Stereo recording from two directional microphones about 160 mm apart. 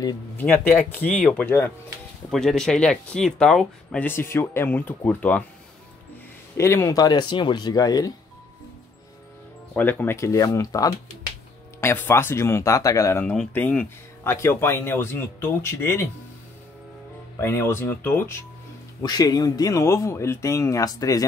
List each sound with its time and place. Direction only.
0.4 s speech: 10° left (ahead or behind)
2.3 s speech: 5° left (ahead or behind)
6.5 s speech: 15° left (ahead or behind)
9.8 s speech: 10° left (ahead or behind)
17.4 s speech: 15° left (ahead or behind)
19.0 s speech: 25° left (ahead or behind)